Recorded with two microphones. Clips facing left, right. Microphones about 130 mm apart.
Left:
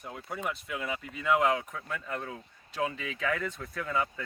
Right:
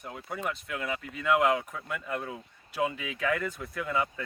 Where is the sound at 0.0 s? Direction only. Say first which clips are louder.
Right 1 dB; centre (ahead or behind).